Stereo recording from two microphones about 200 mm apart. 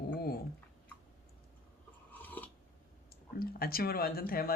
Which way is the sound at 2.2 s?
10° left (ahead or behind).